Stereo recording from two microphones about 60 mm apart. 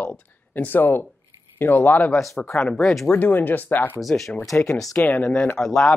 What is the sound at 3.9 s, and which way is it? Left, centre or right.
Speech, centre.